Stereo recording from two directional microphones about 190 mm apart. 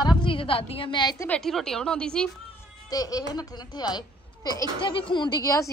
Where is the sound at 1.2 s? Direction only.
5° left (ahead or behind).